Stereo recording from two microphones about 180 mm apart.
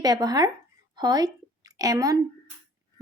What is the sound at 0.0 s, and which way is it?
A woman's voice, 20° right (ahead or behind).